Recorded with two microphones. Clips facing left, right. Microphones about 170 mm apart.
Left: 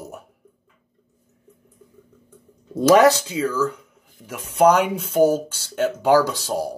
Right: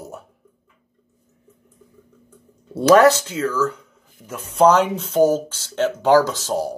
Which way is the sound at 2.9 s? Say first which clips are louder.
Right 2 dB; 15° left (ahead or behind).